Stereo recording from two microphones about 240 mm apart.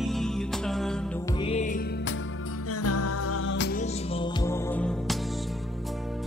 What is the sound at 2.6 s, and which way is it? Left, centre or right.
Music, left.